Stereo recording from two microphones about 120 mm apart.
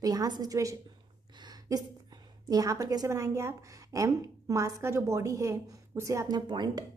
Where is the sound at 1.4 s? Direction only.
35° right (ahead or behind).